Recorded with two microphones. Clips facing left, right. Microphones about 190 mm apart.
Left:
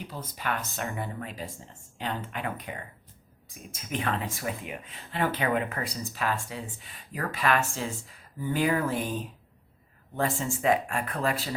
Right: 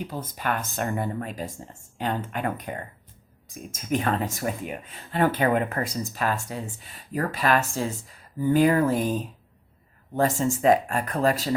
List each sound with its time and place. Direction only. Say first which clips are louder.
0.1 s speech: right 4 dB; 45° right (ahead or behind)